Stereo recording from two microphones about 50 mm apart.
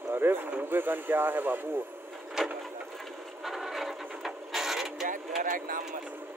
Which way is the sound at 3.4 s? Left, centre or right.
Centre.